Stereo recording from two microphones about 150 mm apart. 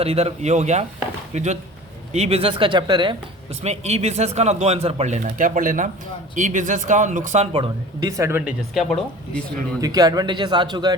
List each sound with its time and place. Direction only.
0.0 s speech: 45° right (ahead or behind)
3.6 s speech: 45° right (ahead or behind)
7.5 s speech: 35° right (ahead or behind)
8.1 s speech: 20° right (ahead or behind)
8.7 s speech: centre (ahead or behind)
9.8 s a man's voice: 25° right (ahead or behind)